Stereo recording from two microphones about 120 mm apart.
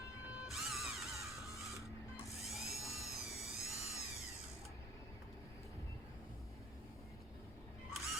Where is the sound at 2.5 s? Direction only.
Centre (ahead or behind).